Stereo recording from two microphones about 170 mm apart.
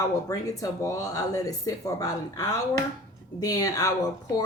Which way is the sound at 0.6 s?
20° left (ahead or behind).